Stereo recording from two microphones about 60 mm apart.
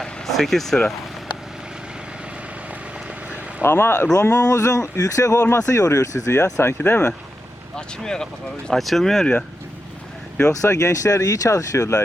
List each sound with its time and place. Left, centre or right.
0.0 s vehicle: centre
3.6 s speech: left
4.1 s speech: left
6.3 s speech: left
7.8 s speech: centre
10.5 s speech: left